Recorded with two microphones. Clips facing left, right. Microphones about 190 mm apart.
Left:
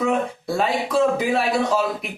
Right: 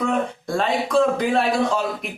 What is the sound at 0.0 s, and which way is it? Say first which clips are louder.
Speech: left 1 dB; 5° left (ahead or behind).